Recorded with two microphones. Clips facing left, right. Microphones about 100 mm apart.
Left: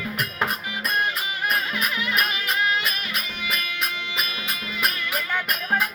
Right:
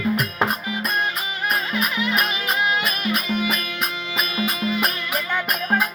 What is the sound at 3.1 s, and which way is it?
Music, 45° right (ahead or behind).